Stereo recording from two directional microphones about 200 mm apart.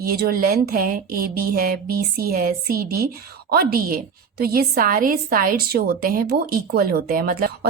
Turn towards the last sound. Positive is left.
turn(degrees=-50)  # may be behind; listen again after turning